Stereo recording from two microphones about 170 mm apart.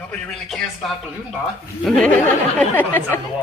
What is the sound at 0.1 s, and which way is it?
Speech, centre (ahead or behind).